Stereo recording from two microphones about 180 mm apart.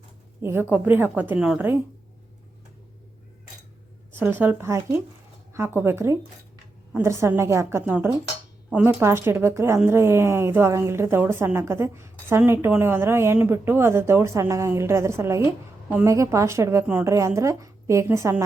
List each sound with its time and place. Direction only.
0.4 s a woman's voice: 10° right (ahead or behind)
4.1 s a woman's voice: 10° right (ahead or behind)